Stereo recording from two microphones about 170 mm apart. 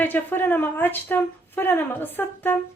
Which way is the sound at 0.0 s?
10° left (ahead or behind).